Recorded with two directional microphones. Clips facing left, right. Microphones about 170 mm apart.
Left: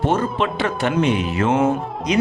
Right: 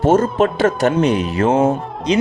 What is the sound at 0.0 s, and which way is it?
Speech, 40° right (ahead or behind).